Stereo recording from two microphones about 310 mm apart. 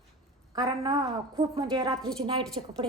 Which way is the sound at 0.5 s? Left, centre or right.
Centre.